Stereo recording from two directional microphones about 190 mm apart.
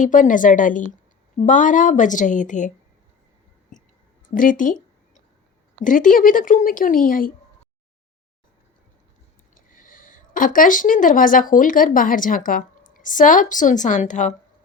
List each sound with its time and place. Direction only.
0.0 s speech: 45° left (ahead or behind)
3.7 s clicking: 40° left (ahead or behind)
4.4 s speech: 45° left (ahead or behind)
5.8 s speech: 45° left (ahead or behind)
9.6 s speech: 45° left (ahead or behind)